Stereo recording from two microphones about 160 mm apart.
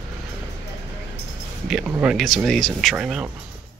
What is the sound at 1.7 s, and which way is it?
Speech, 5° right (ahead or behind).